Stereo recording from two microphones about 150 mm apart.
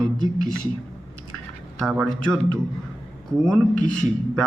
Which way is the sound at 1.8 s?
Centre (ahead or behind).